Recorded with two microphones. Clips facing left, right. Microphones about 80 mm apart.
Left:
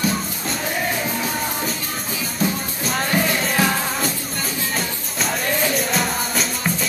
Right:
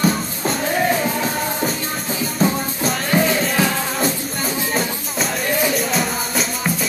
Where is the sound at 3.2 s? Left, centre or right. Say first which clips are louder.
Right 4 dB; right.